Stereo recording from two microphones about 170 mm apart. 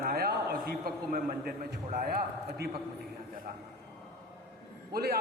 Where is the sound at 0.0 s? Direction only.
60° right (ahead or behind).